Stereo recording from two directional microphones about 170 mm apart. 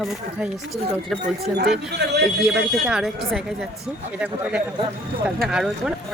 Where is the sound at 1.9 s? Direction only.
80° right.